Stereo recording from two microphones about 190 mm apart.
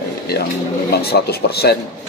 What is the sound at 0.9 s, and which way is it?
Speech, 55° left (ahead or behind).